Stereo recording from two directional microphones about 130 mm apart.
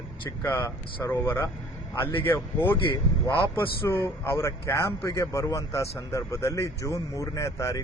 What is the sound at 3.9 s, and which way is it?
Speech, 20° left (ahead or behind).